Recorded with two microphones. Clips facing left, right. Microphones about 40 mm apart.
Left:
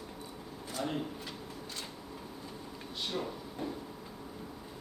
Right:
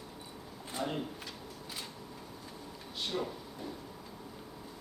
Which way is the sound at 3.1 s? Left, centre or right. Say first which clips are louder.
Right 1 dB; centre.